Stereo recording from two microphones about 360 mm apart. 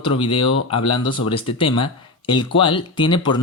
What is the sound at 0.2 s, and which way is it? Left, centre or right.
Speech, centre.